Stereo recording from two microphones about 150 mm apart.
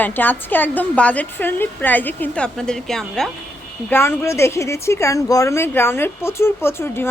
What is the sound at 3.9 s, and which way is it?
Speech, 15° left (ahead or behind).